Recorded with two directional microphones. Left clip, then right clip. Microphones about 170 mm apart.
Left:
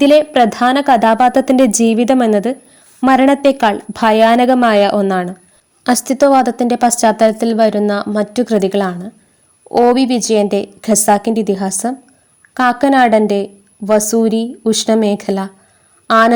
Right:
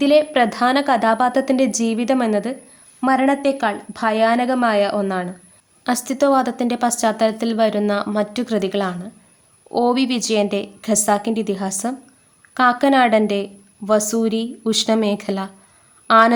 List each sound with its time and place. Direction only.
0.0 s a woman's voice: 35° left (ahead or behind)